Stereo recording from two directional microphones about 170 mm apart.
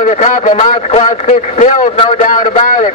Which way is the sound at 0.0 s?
45° left (ahead or behind).